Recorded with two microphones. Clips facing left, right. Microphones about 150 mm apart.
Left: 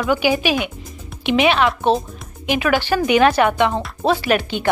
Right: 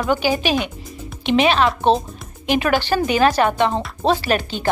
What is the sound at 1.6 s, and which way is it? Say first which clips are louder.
Speech: even; 25° right (ahead or behind).